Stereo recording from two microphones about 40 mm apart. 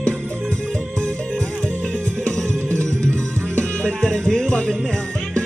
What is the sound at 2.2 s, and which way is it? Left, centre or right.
Music, left.